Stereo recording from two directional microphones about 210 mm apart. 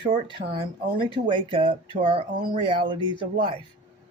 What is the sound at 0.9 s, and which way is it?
Speech, 25° right (ahead or behind).